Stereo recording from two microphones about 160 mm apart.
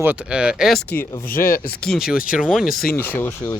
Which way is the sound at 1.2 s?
65° left (ahead or behind).